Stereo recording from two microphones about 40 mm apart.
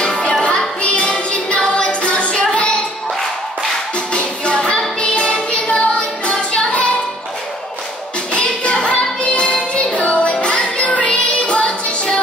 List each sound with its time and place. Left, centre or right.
0.0 s music: left
4.1 s music: left
6.3 s music: centre
8.3 s music: left